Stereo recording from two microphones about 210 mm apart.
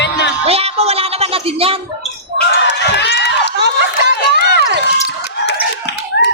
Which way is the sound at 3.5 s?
55° right (ahead or behind).